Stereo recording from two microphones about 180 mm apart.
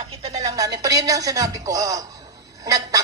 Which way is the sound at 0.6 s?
20° right (ahead or behind).